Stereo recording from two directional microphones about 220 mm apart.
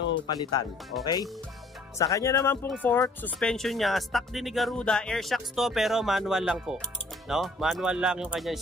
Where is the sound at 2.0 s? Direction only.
15° left (ahead or behind).